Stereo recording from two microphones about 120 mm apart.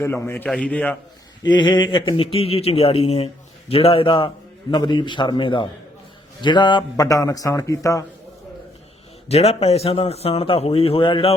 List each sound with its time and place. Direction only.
0.0 s a man's voice: 20° left (ahead or behind)
0.4 s a man's voice: 5° left (ahead or behind)
1.5 s a man's voice: 40° left (ahead or behind)
9.3 s a man's voice: 60° left (ahead or behind)